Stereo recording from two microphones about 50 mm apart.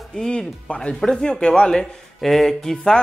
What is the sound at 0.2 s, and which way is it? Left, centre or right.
Speech, centre.